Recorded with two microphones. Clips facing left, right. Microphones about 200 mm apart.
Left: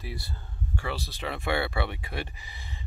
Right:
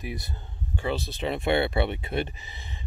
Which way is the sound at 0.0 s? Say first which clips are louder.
Right 4 dB; 20° right (ahead or behind).